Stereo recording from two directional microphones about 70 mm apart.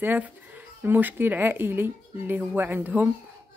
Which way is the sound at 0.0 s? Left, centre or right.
Right.